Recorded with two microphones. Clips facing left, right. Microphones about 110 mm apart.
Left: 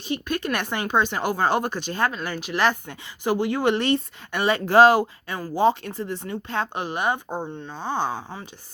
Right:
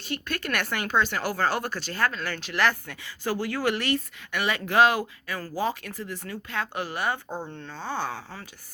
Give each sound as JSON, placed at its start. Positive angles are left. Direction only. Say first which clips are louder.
{"t": 0.0, "sound": "speech", "louder": "left 5 dB", "side_deg": 20}